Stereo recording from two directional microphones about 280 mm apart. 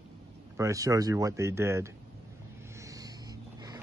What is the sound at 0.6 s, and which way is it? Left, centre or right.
Speech, centre.